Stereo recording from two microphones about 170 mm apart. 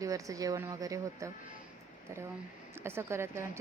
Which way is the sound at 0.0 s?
20° right (ahead or behind).